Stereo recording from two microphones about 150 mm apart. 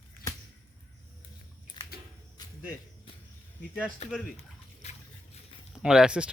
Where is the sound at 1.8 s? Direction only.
30° left (ahead or behind).